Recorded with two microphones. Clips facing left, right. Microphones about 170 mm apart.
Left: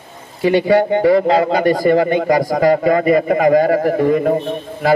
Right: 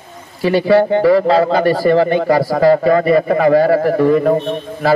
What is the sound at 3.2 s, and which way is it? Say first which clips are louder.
Speech: right 1 dB; 35° right (ahead or behind).